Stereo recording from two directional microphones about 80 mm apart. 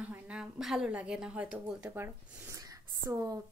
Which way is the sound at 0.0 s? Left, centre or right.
Centre.